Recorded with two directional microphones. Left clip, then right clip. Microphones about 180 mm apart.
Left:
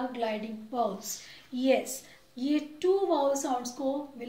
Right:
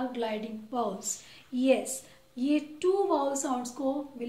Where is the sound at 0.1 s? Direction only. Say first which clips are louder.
Left 1 dB; 20° right (ahead or behind).